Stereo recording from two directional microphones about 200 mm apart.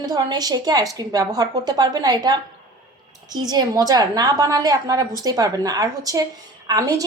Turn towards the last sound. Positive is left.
turn(degrees=-20)  # may be behind; listen again after turning